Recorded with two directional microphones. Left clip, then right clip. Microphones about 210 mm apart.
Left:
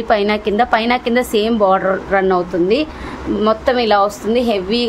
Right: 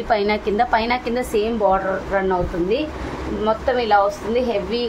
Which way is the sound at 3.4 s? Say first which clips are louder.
Left 5 dB; 55° left (ahead or behind).